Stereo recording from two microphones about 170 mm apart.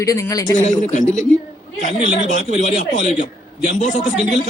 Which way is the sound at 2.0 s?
40° right (ahead or behind).